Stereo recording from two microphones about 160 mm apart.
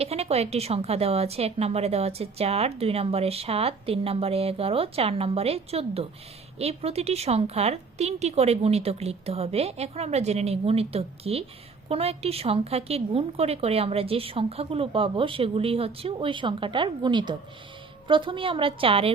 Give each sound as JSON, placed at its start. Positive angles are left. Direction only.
{"t": 0.0, "sound": "a woman's voice", "side_deg": -40}